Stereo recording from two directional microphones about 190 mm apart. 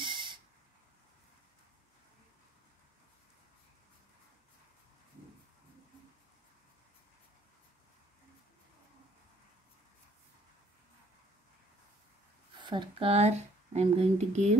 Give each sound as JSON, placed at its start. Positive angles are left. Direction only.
{"t": 0.0, "sound": "owl", "side_deg": -25}
{"t": 12.6, "sound": "speech", "side_deg": -25}